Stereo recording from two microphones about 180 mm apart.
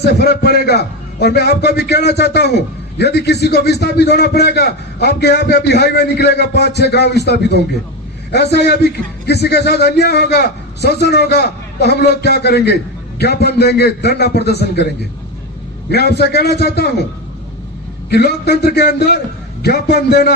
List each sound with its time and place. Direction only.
0.0 s a man's voice: 65° left (ahead or behind)
15.9 s a man's voice: 65° left (ahead or behind)
18.1 s a man's voice: 65° left (ahead or behind)